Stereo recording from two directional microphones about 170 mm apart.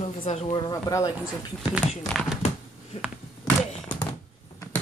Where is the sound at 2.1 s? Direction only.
5° left (ahead or behind).